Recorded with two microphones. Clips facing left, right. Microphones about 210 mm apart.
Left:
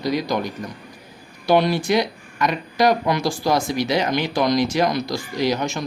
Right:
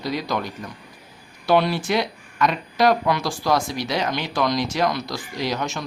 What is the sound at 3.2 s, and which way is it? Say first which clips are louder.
Speech: left 2 dB; 20° left (ahead or behind).